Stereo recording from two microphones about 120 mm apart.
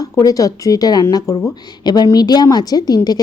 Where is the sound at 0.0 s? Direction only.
30° left (ahead or behind).